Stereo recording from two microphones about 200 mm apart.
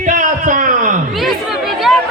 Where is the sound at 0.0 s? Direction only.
40° right (ahead or behind).